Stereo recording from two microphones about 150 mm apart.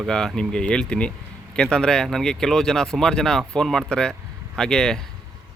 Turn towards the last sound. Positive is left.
turn(degrees=5)  # may be behind; listen again after turning